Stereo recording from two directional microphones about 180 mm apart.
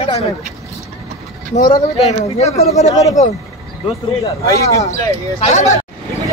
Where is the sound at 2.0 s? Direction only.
35° left (ahead or behind).